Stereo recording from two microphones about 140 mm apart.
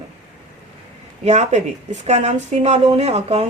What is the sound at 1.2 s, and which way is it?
A woman's voice, 55° right (ahead or behind).